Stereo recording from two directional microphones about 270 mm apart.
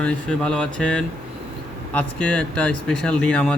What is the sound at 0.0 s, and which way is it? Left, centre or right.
Speech, centre.